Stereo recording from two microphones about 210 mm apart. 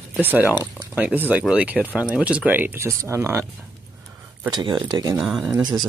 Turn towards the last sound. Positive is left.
turn(degrees=-20)  # may be behind; listen again after turning